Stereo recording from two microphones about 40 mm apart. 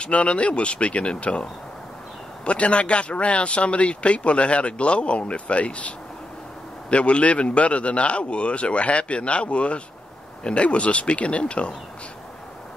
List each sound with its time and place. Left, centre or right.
0.0 s speech: left
2.4 s speech: left